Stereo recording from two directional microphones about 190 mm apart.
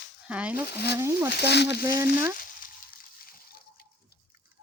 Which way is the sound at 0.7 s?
60° left (ahead or behind).